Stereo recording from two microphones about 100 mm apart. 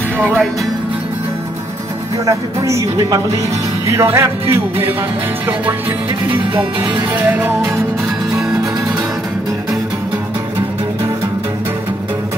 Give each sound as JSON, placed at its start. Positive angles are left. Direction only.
{"t": 2.2, "sound": "speech", "side_deg": -30}
{"t": 3.8, "sound": "music", "side_deg": -25}
{"t": 7.2, "sound": "music", "side_deg": -15}